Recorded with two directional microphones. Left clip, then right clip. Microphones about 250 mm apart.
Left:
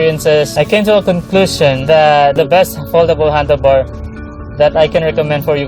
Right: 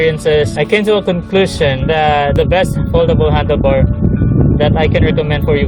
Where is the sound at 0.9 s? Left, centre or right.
Right.